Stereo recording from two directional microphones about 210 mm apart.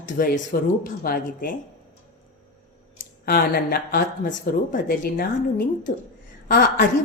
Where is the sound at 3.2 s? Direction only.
45° left (ahead or behind).